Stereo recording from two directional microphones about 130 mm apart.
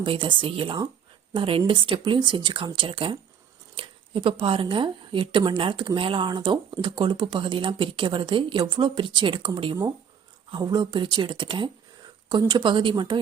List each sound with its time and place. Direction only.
0.0 s speech: 40° right (ahead or behind)